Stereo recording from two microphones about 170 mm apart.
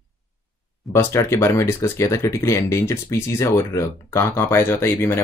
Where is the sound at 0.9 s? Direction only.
15° left (ahead or behind).